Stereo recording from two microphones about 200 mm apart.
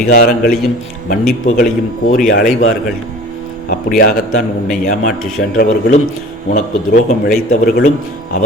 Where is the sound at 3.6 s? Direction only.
45° left (ahead or behind).